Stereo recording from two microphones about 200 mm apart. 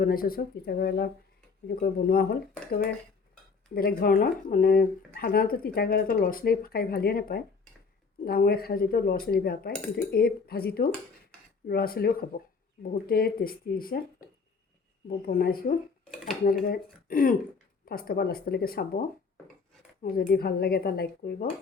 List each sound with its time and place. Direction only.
0.0 s speech: 45° left (ahead or behind)